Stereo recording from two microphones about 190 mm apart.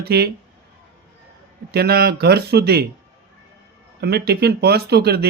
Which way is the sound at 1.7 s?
55° right (ahead or behind).